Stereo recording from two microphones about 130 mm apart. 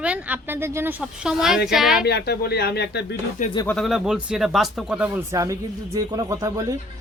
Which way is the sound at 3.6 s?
Centre (ahead or behind).